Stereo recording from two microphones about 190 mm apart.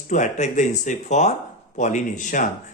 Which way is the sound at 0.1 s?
40° left (ahead or behind).